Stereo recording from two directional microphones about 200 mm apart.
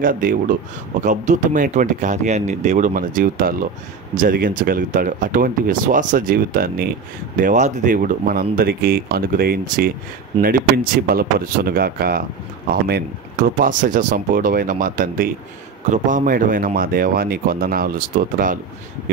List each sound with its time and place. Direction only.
0.0 s speech: 45° right (ahead or behind)